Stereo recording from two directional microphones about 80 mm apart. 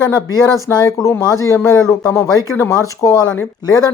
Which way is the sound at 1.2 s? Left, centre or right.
Left.